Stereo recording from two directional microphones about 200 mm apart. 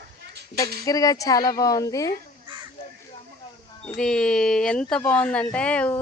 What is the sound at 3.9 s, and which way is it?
A woman's voice, 5° left (ahead or behind).